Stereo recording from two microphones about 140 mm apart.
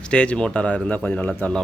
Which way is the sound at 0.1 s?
5° left (ahead or behind).